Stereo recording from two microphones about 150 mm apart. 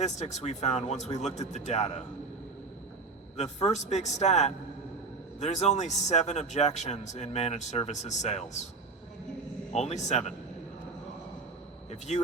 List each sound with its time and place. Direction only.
0.0 s a man's voice: 50° left (ahead or behind)
3.3 s a man's voice: 50° left (ahead or behind)
9.7 s a man's voice: 50° left (ahead or behind)
11.9 s speech: 50° left (ahead or behind)